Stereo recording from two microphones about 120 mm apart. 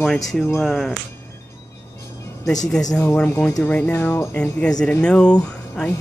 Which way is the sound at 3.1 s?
20° left (ahead or behind).